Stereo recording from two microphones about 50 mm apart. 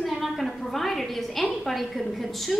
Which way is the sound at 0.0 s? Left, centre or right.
Centre.